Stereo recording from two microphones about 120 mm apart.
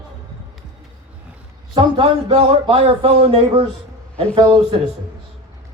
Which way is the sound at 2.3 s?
55° right (ahead or behind).